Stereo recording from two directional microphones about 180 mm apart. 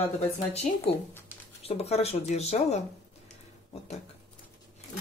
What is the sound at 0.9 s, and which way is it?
Speech, 30° left (ahead or behind).